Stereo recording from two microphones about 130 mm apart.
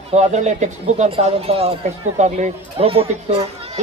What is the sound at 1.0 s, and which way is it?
Speech, 45° right (ahead or behind).